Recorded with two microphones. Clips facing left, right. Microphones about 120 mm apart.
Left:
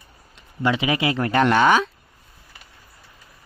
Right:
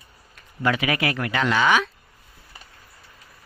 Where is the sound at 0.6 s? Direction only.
25° left (ahead or behind).